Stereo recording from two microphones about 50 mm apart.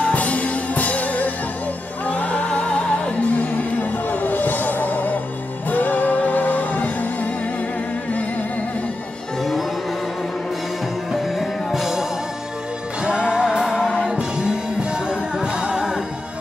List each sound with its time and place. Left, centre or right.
0.1 s music: left
9.4 s music: centre
11.1 s music: centre
13.0 s music: centre